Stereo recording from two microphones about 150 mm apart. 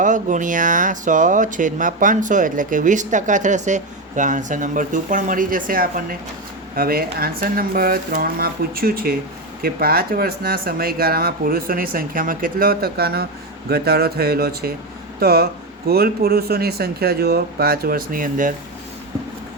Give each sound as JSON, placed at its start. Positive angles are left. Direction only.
{"t": 0.0, "sound": "speech", "side_deg": -60}
{"t": 6.7, "sound": "speech", "side_deg": -80}